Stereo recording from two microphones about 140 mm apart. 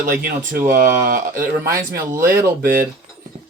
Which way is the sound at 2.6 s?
90° right.